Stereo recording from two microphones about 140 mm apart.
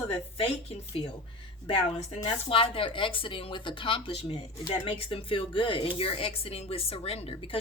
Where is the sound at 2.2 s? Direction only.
40° left (ahead or behind).